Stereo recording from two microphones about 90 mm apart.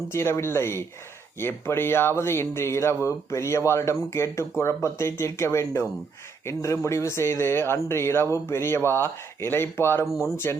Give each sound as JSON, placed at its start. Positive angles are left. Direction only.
{"t": 0.1, "sound": "speech", "side_deg": 30}
{"t": 10.1, "sound": "speech", "side_deg": -5}
{"t": 10.3, "sound": "speech", "side_deg": 30}